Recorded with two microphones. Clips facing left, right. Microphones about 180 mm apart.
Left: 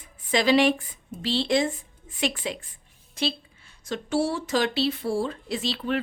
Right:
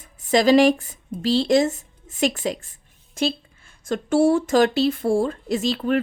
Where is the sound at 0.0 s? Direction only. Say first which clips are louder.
Right 6 dB; 45° right (ahead or behind).